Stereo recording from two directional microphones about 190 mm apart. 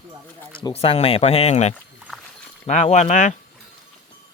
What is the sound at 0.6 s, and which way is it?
Speech, 25° left (ahead or behind).